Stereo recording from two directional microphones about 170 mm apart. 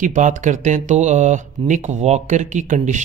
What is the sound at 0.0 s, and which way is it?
Speech, 50° right (ahead or behind).